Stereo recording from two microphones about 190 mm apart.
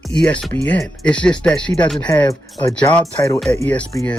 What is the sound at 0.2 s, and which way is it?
Speech, 5° left (ahead or behind).